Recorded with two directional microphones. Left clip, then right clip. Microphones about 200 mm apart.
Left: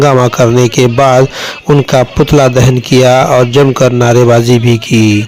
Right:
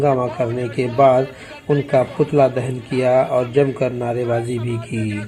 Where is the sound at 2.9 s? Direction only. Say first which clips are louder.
Left 9 dB; 55° left (ahead or behind).